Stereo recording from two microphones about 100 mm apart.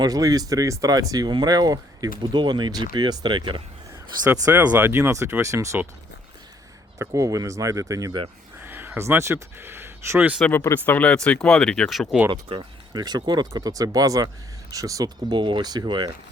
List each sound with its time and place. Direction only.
0.0 s speech: 40° right (ahead or behind)
4.5 s speech: 20° right (ahead or behind)
7.0 s speech: 35° right (ahead or behind)
8.6 s speech: 20° right (ahead or behind)
10.4 s speech: 20° left (ahead or behind); by 12.0 s 5° left (ahead or behind)
12.3 s speech: 55° right (ahead or behind)